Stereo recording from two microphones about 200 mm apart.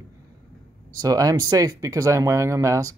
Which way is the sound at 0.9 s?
15° right (ahead or behind).